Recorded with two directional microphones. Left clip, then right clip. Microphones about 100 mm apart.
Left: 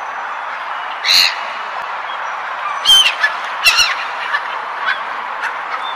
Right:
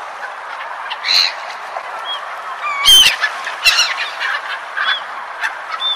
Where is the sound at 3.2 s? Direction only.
Centre (ahead or behind).